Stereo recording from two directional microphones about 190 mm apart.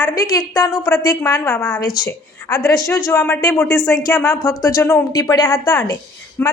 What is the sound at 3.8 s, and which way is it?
Speech, centre (ahead or behind).